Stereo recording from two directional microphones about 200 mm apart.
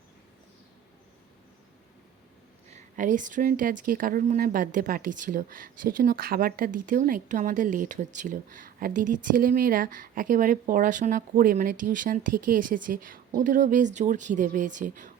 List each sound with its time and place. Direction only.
2.6 s a woman's voice: 40° right (ahead or behind)